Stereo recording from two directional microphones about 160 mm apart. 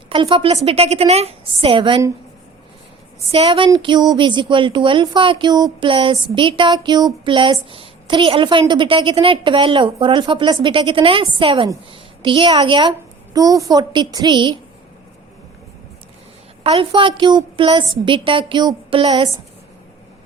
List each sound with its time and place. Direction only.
0.1 s a woman's voice: 35° right (ahead or behind)
3.3 s a woman's voice: 35° right (ahead or behind)
16.6 s a woman's voice: 35° right (ahead or behind)